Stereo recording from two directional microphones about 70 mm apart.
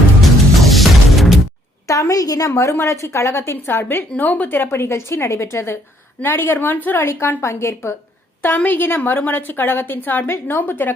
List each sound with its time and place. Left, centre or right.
0.2 s music: centre
1.9 s a woman's voice: left